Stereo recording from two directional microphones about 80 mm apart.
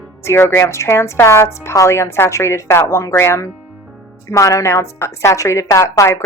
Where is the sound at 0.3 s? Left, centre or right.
Left.